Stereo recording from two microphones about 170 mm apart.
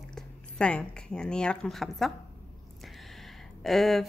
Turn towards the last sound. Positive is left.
turn(degrees=0)  # may be behind; listen again after turning